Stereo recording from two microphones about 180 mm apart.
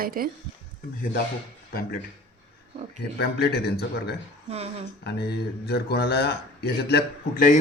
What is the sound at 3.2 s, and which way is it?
Speech, 65° left (ahead or behind).